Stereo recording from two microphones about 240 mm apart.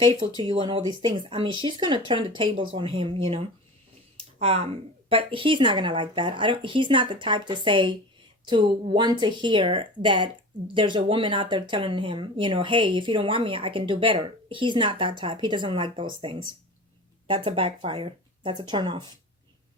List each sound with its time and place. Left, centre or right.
0.3 s speech: centre
4.2 s a sound: right
5.0 s speech: right